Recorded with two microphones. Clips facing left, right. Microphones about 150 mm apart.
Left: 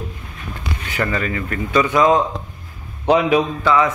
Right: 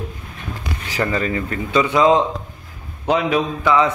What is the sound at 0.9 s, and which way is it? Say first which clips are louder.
A man's voice: right 1 dB; 30° right (ahead or behind).